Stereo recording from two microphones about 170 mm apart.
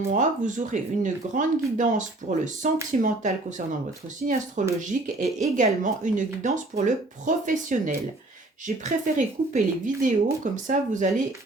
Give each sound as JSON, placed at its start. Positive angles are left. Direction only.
{"t": 0.1, "sound": "speech", "side_deg": -45}
{"t": 4.2, "sound": "speech", "side_deg": -50}